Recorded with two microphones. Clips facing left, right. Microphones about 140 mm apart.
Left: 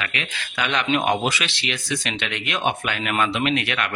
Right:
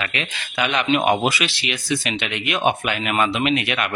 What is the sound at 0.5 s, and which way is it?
Speech, 10° right (ahead or behind).